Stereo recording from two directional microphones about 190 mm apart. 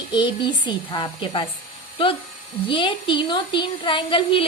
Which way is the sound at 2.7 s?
25° left (ahead or behind).